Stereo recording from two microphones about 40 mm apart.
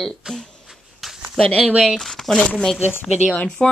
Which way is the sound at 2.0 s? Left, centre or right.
Centre.